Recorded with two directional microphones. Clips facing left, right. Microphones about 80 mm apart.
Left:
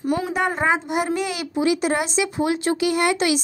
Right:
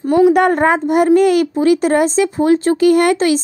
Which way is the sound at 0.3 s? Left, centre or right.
Right.